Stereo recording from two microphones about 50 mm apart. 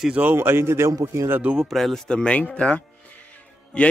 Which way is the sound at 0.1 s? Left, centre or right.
Right.